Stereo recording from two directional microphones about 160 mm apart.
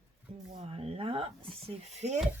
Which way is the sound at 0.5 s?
40° right (ahead or behind).